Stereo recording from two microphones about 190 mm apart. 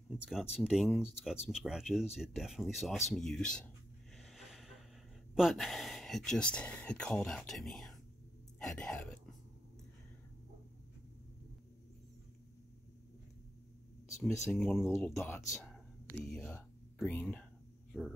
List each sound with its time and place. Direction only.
0.1 s speech: centre (ahead or behind)
4.2 s a sound: centre (ahead or behind)
5.3 s speech: centre (ahead or behind)
14.3 s speech: 15° left (ahead or behind)
14.6 s speech: centre (ahead or behind)
15.7 s whispering: 5° left (ahead or behind)
17.9 s speech: centre (ahead or behind)